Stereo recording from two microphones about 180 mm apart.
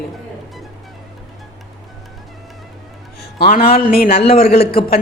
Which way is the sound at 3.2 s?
55° left (ahead or behind).